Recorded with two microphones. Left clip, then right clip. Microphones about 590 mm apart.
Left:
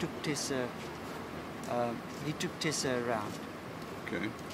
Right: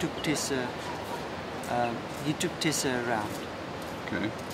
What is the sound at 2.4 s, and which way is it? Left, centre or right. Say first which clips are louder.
Speech: right 4 dB; left.